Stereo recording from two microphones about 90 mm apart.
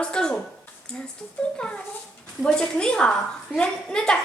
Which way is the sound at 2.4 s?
10° left (ahead or behind).